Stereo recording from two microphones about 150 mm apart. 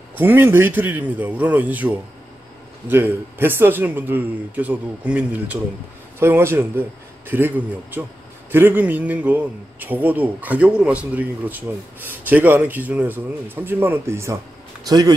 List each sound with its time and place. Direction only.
0.1 s a man's voice: 15° right (ahead or behind)